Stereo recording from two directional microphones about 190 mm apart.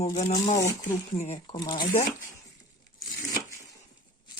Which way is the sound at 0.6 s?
15° left (ahead or behind).